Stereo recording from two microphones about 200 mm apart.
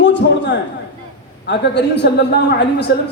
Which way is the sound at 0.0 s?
65° left (ahead or behind).